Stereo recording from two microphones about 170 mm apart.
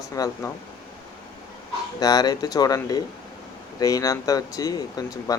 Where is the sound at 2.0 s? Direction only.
20° left (ahead or behind).